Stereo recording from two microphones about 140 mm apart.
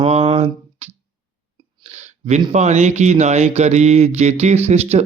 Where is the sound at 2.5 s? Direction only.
55° right (ahead or behind).